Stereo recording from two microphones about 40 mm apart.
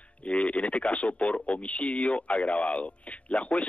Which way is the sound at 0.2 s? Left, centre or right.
Left.